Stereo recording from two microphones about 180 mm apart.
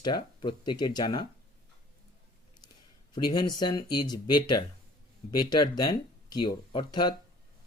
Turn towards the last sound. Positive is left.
turn(degrees=25)  # may be behind; listen again after turning